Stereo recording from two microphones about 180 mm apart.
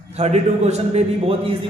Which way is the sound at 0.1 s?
35° right (ahead or behind).